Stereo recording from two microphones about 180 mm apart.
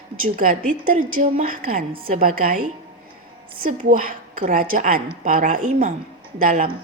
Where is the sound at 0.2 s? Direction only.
50° right (ahead or behind).